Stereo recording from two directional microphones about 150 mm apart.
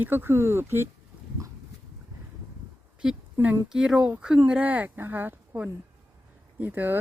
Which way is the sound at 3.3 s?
15° right (ahead or behind).